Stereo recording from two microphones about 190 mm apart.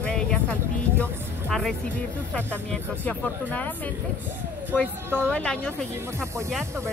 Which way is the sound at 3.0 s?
5° left (ahead or behind).